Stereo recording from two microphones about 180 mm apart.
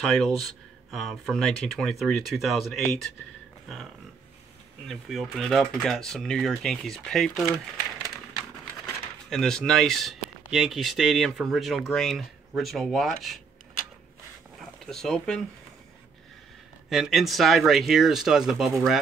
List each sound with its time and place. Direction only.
0.0 s speech: centre (ahead or behind)
3.6 s a sound: centre (ahead or behind)
4.8 s speech: centre (ahead or behind)
9.3 s speech: centre (ahead or behind)
14.8 s speech: centre (ahead or behind)
16.9 s speech: centre (ahead or behind)